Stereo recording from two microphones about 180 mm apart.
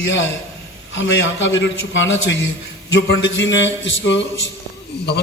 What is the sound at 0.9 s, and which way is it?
A man's voice, 80° left.